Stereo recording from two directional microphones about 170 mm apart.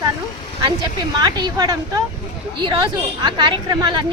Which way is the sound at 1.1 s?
25° right (ahead or behind).